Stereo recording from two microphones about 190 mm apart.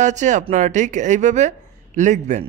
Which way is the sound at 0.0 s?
40° right (ahead or behind).